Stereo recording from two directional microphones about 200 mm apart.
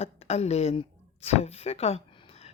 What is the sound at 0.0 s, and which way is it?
A woman's voice, 30° left (ahead or behind).